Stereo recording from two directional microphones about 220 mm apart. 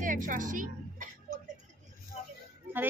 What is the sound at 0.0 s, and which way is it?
Music, 35° right (ahead or behind).